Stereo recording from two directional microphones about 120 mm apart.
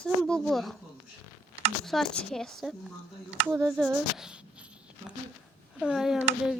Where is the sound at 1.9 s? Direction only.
5° left (ahead or behind).